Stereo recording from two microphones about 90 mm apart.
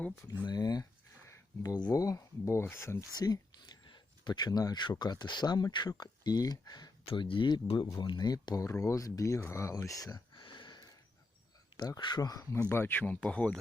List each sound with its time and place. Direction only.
0.4 s speech: 45° left (ahead or behind)
1.2 s a sound: 35° left (ahead or behind)
1.7 s speech: 45° left (ahead or behind); by 3.0 s 30° left (ahead or behind)
3.1 s speech: 45° left (ahead or behind)
7.1 s speech: 75° left (ahead or behind); by 9.7 s 30° left (ahead or behind)
9.7 s speech: 40° left (ahead or behind)
10.4 s a sound: 65° left (ahead or behind)
11.9 s speech: 60° left (ahead or behind)
12.2 s speech: 45° left (ahead or behind)
12.6 s speech: 25° left (ahead or behind)